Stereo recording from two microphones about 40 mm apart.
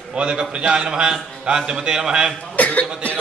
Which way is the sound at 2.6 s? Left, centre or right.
Left.